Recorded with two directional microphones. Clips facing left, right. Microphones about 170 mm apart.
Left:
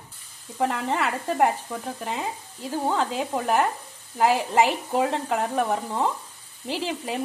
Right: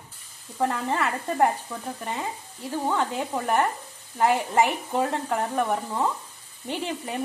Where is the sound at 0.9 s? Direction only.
15° left (ahead or behind).